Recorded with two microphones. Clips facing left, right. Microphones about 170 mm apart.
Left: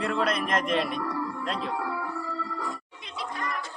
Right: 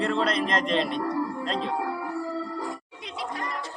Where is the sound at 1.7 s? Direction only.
20° right (ahead or behind).